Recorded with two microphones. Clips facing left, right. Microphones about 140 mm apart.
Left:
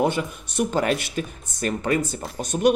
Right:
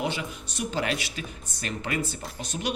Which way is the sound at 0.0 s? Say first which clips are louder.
Left 8 dB; 50° left (ahead or behind).